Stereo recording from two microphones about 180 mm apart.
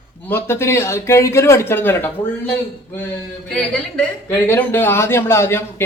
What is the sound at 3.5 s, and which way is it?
Speech, 10° left (ahead or behind).